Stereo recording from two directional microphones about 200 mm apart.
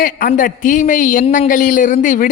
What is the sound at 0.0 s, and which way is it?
A man's voice, 45° left (ahead or behind).